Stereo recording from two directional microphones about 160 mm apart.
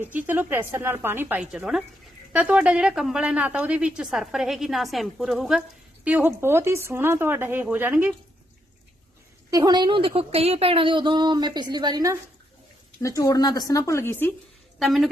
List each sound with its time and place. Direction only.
0.0 s a woman's voice: 10° right (ahead or behind)
9.5 s a woman's voice: 25° right (ahead or behind)
13.0 s speech: 20° left (ahead or behind)
14.8 s a woman's voice: centre (ahead or behind)